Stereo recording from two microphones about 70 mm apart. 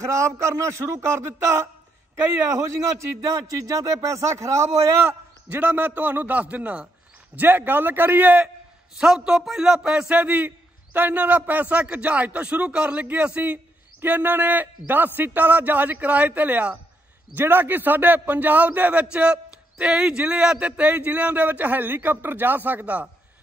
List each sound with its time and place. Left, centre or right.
0.0 s a man's voice: right
5.0 s a man's voice: right
8.9 s a man's voice: centre; by 23.0 s right